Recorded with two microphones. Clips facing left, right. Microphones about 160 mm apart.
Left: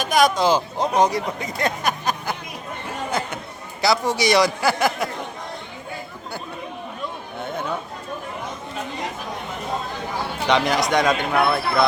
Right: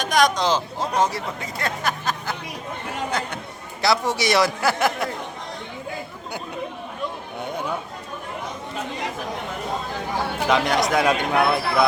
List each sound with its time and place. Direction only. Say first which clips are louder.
0.0 s speech: left 2 dB; 5° left (ahead or behind)
3.8 s speech: left 1 dB; centre (ahead or behind)
10.5 s speech: left 1 dB; centre (ahead or behind)